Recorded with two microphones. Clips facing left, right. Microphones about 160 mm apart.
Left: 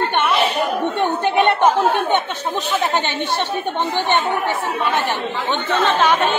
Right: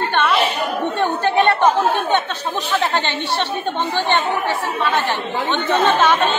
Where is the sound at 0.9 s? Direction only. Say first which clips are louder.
Right 1 dB; 20° left (ahead or behind).